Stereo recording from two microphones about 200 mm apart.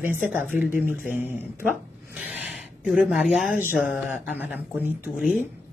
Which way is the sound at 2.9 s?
5° right (ahead or behind).